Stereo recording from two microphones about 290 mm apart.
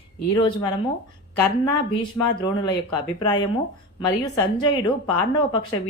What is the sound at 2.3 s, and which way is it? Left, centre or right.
Speech, centre.